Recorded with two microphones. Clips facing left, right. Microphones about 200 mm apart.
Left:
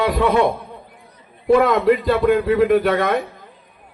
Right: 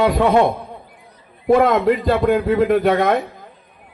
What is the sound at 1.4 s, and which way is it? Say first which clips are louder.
A man's voice: even; 45° right (ahead or behind).